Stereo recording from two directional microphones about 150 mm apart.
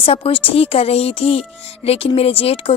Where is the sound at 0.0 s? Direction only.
40° left (ahead or behind).